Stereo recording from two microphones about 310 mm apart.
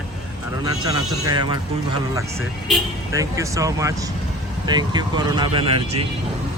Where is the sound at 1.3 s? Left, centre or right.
Centre.